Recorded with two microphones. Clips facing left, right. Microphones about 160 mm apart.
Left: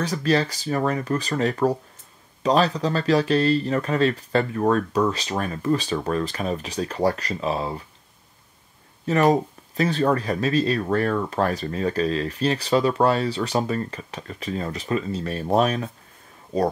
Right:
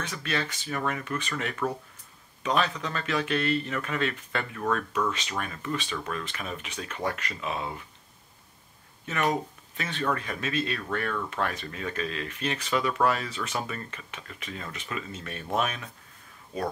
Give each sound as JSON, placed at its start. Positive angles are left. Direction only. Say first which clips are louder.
{"t": 0.0, "sound": "speech", "louder": "left 10 dB", "side_deg": 35}
{"t": 9.0, "sound": "speech", "louder": "left 9 dB", "side_deg": 35}